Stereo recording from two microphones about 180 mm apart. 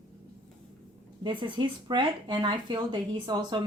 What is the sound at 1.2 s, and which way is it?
Speech, 30° right (ahead or behind).